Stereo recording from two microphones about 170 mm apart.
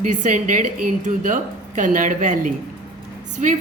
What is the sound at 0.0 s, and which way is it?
Speech, 50° right (ahead or behind).